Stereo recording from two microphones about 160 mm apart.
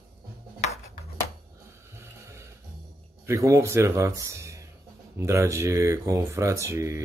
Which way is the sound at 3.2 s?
20° right (ahead or behind).